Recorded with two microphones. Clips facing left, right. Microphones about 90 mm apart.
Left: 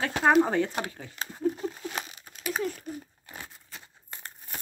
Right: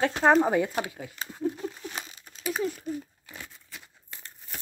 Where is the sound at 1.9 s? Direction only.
65° left (ahead or behind).